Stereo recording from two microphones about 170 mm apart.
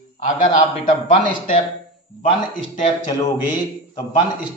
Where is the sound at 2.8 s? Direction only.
30° left (ahead or behind).